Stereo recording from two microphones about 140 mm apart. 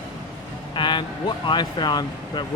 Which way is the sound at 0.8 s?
35° left (ahead or behind).